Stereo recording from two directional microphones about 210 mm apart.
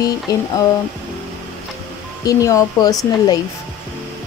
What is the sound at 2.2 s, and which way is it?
Speech, 15° left (ahead or behind).